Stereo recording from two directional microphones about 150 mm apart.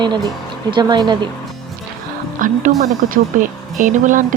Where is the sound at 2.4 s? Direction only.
60° right (ahead or behind).